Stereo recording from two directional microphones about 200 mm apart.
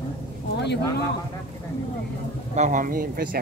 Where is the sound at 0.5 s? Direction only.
60° left (ahead or behind).